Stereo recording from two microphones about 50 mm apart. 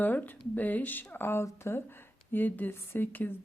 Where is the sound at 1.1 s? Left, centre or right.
Left.